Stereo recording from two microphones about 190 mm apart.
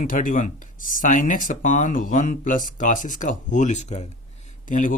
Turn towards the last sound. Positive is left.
turn(degrees=40)  # may be behind; listen again after turning